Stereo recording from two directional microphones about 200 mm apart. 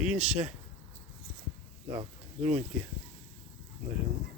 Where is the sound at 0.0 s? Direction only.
5° right (ahead or behind).